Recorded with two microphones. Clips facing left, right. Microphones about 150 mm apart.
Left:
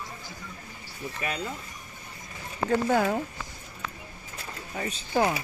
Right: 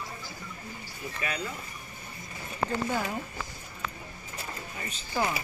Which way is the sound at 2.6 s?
55° left (ahead or behind).